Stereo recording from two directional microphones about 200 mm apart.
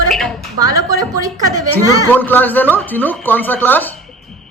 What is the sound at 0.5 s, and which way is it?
Speech, 20° right (ahead or behind).